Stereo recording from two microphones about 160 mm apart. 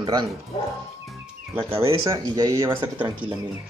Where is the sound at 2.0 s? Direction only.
20° right (ahead or behind).